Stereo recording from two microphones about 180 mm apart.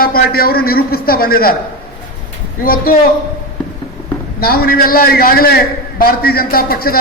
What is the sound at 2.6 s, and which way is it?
Speech, 55° left (ahead or behind).